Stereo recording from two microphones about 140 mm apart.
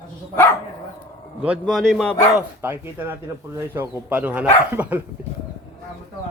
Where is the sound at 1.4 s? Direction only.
5° right (ahead or behind).